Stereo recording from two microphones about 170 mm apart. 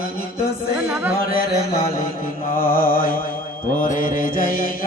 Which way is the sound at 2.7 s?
60° left (ahead or behind).